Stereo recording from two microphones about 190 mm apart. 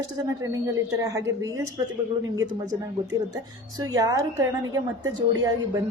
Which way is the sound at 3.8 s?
20° right (ahead or behind).